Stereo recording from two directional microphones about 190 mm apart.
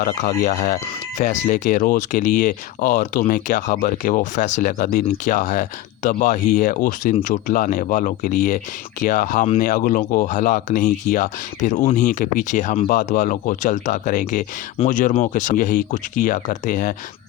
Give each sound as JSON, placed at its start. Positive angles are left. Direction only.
{"t": 0.0, "sound": "speech", "side_deg": 40}